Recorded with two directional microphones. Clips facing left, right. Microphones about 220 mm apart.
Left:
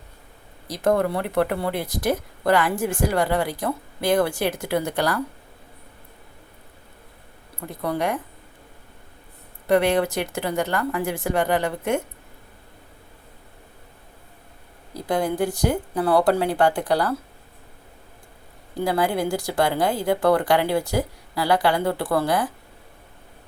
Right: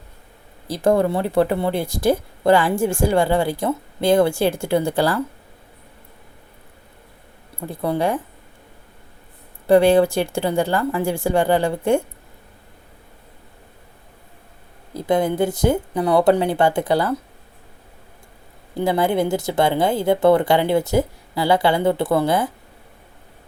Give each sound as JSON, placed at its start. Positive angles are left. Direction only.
{"t": 0.7, "sound": "speech", "side_deg": -30}
{"t": 7.7, "sound": "speech", "side_deg": -30}
{"t": 9.6, "sound": "speech", "side_deg": -30}
{"t": 14.9, "sound": "speech", "side_deg": -25}
{"t": 18.8, "sound": "speech", "side_deg": -25}